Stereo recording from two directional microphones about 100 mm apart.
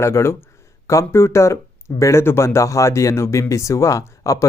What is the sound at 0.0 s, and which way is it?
Speech, 25° left (ahead or behind).